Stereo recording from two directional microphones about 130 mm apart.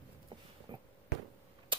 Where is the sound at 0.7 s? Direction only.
35° right (ahead or behind).